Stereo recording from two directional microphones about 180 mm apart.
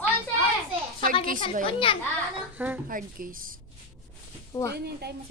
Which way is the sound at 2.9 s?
50° right (ahead or behind).